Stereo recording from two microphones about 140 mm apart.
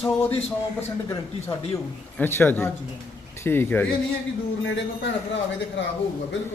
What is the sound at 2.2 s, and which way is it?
A man's voice, 15° left (ahead or behind).